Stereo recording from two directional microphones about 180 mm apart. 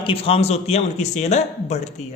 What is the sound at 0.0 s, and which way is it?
Speech, 30° left (ahead or behind).